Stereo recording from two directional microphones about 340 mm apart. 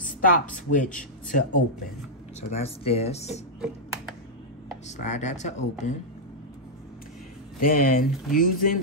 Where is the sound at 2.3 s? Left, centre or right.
Centre.